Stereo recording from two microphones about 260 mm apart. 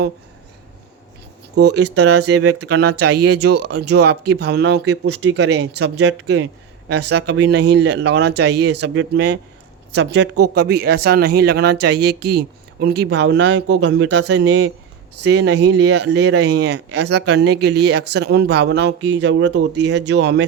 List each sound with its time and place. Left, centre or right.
1.5 s speech: right